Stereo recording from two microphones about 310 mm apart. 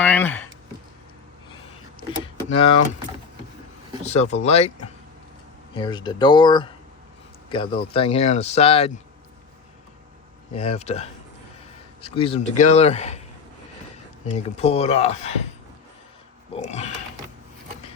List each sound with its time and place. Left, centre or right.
0.0 s speech: centre
2.2 s vehicle: centre
4.0 s speech: left
10.5 s speech: centre
14.3 s speech: left
16.6 s speech: left